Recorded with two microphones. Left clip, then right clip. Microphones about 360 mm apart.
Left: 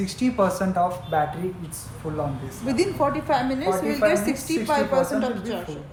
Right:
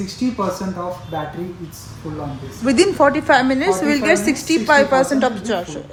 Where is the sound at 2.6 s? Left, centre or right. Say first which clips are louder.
Right 9 dB; right.